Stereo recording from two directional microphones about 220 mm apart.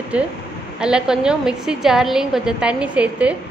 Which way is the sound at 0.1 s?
5° right (ahead or behind).